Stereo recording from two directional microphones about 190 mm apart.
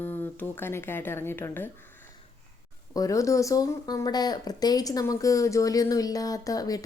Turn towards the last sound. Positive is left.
turn(degrees=20)  # may be behind; listen again after turning